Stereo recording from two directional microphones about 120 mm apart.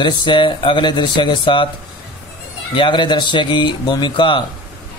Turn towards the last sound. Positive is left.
turn(degrees=40)  # may be behind; listen again after turning